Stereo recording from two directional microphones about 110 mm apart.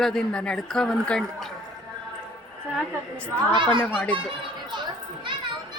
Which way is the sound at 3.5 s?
45° right (ahead or behind).